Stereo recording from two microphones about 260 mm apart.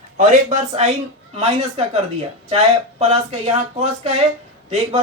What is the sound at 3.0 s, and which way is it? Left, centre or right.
Speech, right.